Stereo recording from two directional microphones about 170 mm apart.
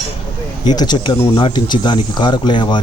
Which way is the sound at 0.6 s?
25° left (ahead or behind).